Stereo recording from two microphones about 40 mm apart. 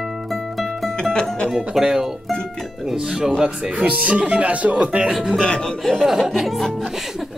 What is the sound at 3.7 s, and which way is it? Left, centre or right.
Speech, right.